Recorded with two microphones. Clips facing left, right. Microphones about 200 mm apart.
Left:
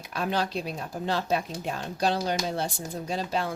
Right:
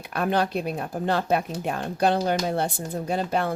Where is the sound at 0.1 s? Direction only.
55° right (ahead or behind).